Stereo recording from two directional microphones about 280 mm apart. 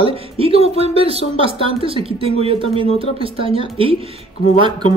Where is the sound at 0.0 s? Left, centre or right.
Centre.